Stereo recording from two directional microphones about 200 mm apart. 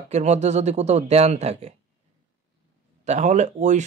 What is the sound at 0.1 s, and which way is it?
Speech, 35° right (ahead or behind).